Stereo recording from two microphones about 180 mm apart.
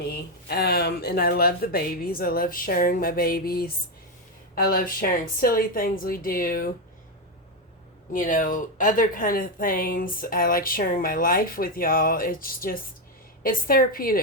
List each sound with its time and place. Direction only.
0.0 s speech: 60° left (ahead or behind)
8.1 s speech: 45° left (ahead or behind)